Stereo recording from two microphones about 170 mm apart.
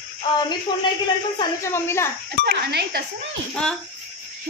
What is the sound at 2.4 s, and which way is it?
Speech, 80° right.